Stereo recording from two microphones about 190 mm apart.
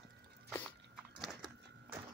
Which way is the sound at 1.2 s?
Centre (ahead or behind).